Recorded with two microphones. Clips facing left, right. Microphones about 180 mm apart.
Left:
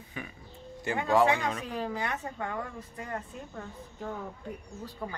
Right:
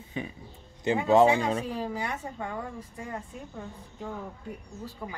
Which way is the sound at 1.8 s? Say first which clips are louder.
Right 1 dB; 10° right (ahead or behind).